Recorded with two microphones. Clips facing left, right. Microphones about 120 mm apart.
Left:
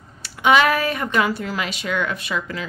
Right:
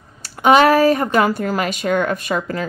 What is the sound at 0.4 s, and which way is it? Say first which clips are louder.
A woman's voice: right 5 dB; 40° right (ahead or behind).